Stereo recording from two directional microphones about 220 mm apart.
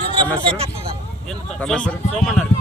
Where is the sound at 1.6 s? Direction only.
5° left (ahead or behind).